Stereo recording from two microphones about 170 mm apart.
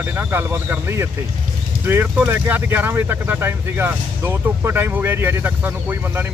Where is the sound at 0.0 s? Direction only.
10° right (ahead or behind).